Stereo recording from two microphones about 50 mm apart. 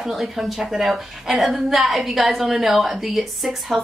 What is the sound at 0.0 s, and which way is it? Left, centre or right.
Speech, centre.